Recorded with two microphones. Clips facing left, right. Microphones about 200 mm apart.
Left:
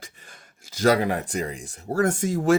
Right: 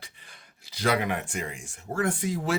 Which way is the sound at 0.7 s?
40° left (ahead or behind).